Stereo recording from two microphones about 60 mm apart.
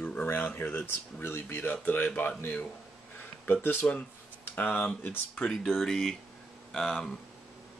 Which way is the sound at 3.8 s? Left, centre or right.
Left.